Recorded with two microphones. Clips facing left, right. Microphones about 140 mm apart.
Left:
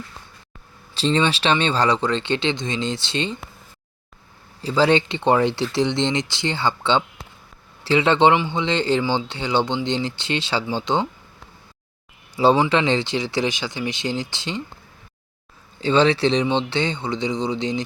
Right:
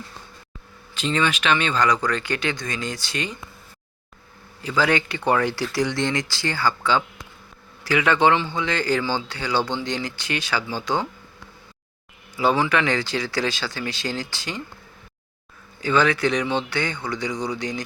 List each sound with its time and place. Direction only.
0.9 s speech: 30° left (ahead or behind)
4.6 s speech: 30° left (ahead or behind)
12.4 s speech: 30° left (ahead or behind)
15.8 s speech: 30° left (ahead or behind)